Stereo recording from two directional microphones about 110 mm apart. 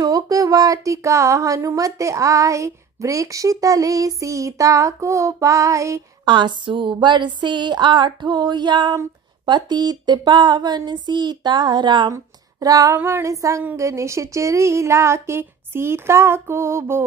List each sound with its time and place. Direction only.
0.0 s speech: 30° right (ahead or behind)
6.2 s a sound: 45° right (ahead or behind)
12.1 s female singing: 30° right (ahead or behind)
12.9 s speech: 25° right (ahead or behind)